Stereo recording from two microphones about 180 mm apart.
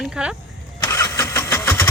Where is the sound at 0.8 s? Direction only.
20° left (ahead or behind).